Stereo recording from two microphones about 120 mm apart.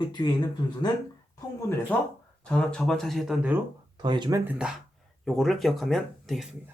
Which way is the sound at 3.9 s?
40° right (ahead or behind).